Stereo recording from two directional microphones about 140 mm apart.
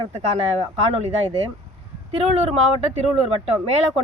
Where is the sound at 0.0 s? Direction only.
45° right (ahead or behind).